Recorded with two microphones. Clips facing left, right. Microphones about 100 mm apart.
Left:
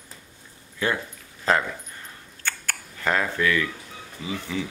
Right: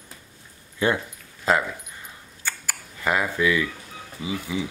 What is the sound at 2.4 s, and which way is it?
Camera, 10° right (ahead or behind).